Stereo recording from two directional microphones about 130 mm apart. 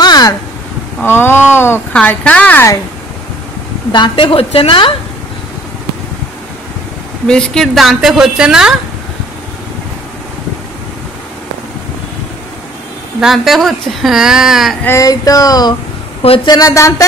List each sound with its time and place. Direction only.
0.0 s a sound: 30° left (ahead or behind)
1.0 s speech: 15° left (ahead or behind)
3.9 s a woman's voice: 40° left (ahead or behind)
7.2 s a woman's voice: 5° left (ahead or behind)
13.2 s a woman's voice: centre (ahead or behind)
14.8 s a sound: 20° left (ahead or behind)